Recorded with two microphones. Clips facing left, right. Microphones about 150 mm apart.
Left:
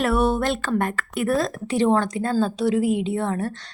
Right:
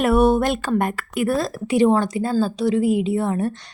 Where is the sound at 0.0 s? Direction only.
20° right (ahead or behind).